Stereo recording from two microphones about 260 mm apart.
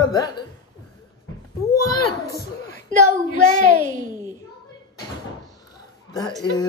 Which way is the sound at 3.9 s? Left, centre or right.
Right.